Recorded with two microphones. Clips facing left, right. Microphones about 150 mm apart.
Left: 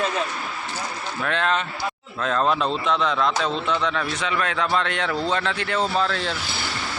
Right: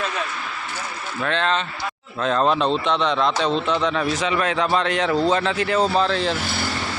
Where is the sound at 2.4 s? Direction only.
30° right (ahead or behind).